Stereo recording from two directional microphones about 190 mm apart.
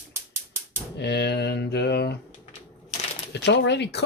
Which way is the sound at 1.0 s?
60° left (ahead or behind).